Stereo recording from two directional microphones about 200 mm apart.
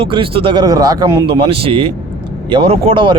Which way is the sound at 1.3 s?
30° right (ahead or behind).